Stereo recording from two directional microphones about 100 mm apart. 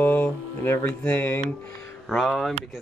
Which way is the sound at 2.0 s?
Centre (ahead or behind).